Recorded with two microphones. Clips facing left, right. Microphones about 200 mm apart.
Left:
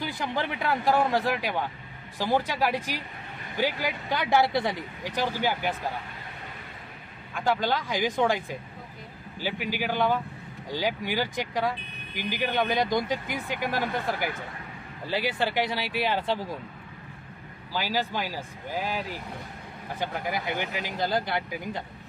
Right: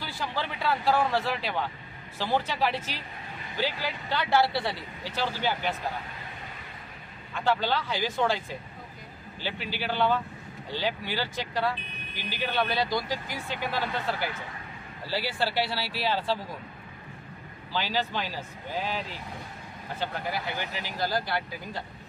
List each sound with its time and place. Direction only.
0.0 s speech: 20° left (ahead or behind)
7.3 s speech: 10° left (ahead or behind)
17.7 s speech: 10° left (ahead or behind)